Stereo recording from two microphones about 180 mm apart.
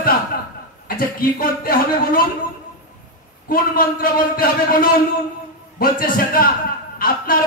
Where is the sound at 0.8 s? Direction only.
55° left (ahead or behind).